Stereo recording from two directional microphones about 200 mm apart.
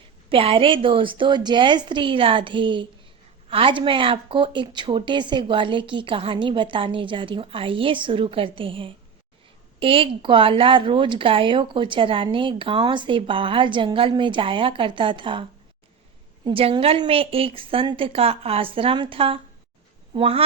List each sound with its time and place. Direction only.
0.3 s speech: 25° right (ahead or behind)